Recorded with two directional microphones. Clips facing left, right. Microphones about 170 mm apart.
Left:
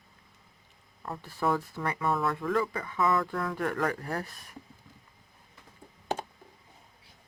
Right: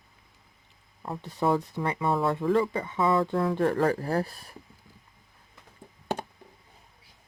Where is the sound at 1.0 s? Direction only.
20° right (ahead or behind).